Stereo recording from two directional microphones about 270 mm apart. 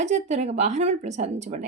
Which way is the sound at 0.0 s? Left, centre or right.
Right.